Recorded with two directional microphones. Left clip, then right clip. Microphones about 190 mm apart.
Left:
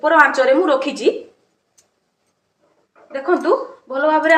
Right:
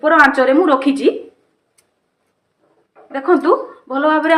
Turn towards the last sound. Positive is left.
turn(degrees=-20)  # may be behind; listen again after turning